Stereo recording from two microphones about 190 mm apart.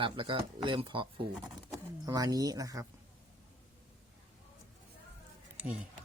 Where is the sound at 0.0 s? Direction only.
25° right (ahead or behind).